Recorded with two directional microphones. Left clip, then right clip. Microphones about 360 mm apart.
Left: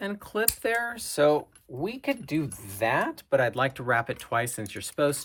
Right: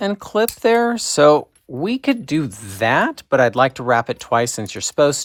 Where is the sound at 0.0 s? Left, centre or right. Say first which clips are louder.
Right 11 dB; centre.